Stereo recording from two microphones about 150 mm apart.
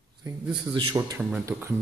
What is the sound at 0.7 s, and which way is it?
Speech, 30° right (ahead or behind).